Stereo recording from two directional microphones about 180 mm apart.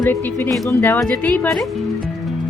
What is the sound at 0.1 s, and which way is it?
Speech, 10° left (ahead or behind).